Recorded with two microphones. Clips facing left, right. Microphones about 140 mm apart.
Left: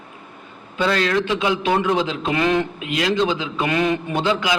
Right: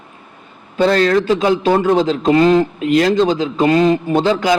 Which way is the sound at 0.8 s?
40° right (ahead or behind).